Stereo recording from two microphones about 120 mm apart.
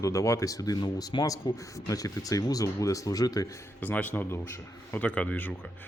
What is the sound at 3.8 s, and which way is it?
A man's voice, 15° left (ahead or behind).